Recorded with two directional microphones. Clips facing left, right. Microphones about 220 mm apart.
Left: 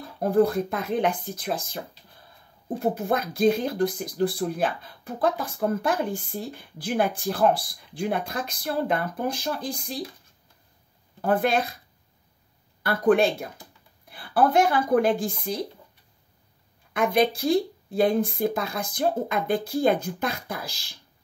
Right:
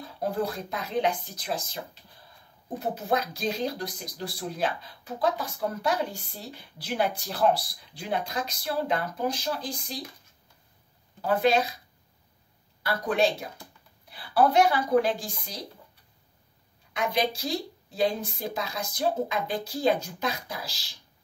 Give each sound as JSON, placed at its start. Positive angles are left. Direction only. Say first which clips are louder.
{"t": 0.0, "sound": "speech", "louder": "left 8 dB", "side_deg": 55}
{"t": 2.8, "sound": "speech", "louder": "left 3 dB", "side_deg": 55}
{"t": 11.1, "sound": "speech", "louder": "left 1 dB", "side_deg": 50}
{"t": 12.8, "sound": "speech", "louder": "left 5 dB", "side_deg": 55}
{"t": 16.9, "sound": "speech", "louder": "left 6 dB", "side_deg": 55}